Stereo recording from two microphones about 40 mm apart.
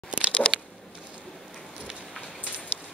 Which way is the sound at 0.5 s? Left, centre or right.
Left.